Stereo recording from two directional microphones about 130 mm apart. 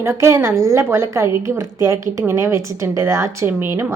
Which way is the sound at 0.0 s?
20° right (ahead or behind).